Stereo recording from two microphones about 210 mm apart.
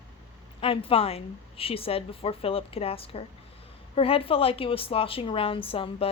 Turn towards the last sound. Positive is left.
turn(degrees=25)  # may be behind; listen again after turning